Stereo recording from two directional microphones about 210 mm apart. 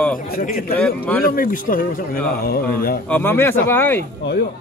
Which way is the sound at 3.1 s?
10° left (ahead or behind).